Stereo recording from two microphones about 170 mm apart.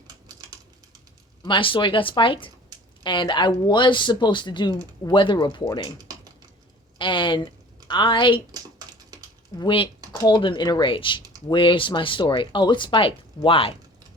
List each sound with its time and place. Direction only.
1.4 s speech: 30° left (ahead or behind)
6.0 s typing: 20° right (ahead or behind)
7.0 s speech: 30° left (ahead or behind)
9.6 s speech: 30° left (ahead or behind)